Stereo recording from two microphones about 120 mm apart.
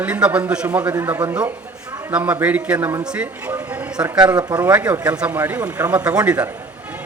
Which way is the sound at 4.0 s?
10° right (ahead or behind).